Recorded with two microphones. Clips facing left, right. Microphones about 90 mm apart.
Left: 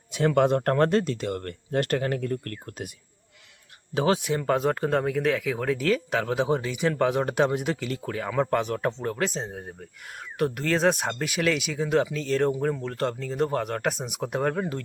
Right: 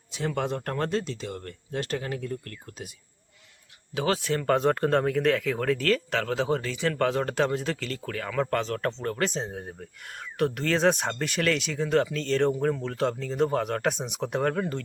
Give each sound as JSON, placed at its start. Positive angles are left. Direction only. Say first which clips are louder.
{"t": 0.1, "sound": "speech", "louder": "left 8 dB", "side_deg": 55}
{"t": 3.9, "sound": "speech", "louder": "left 3 dB", "side_deg": 20}
{"t": 4.4, "sound": "speech", "louder": "right 2 dB", "side_deg": 5}